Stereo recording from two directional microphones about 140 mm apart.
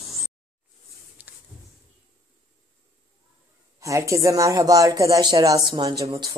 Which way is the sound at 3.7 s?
20° right (ahead or behind).